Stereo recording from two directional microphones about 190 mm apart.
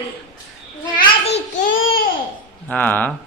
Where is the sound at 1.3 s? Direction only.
90° left.